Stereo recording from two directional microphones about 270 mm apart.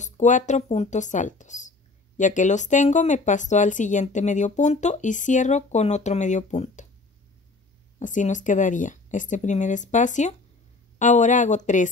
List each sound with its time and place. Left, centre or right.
0.0 s speech: left
8.0 s speech: left